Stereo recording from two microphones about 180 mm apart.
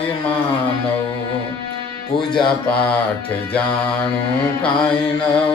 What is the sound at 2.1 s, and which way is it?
Music, 5° left (ahead or behind).